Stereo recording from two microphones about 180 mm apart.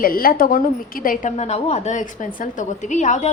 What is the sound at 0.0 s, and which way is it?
A woman's voice, 55° left (ahead or behind).